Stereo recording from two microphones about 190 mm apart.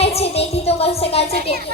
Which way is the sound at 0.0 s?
30° left (ahead or behind).